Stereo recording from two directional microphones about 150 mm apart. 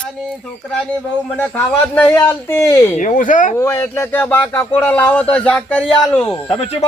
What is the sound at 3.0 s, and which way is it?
Speech, 60° left (ahead or behind).